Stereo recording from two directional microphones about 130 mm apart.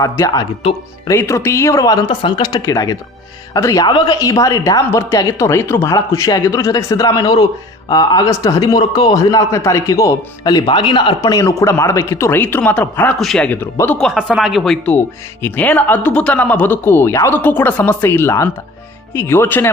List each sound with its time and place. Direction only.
0.0 s a man's voice: 30° left (ahead or behind)
3.8 s a man's voice: 35° left (ahead or behind); by 13.1 s 15° left (ahead or behind)
13.1 s speech: centre (ahead or behind)
14.0 s speech: 5° right (ahead or behind)
14.8 s speech: 15° left (ahead or behind)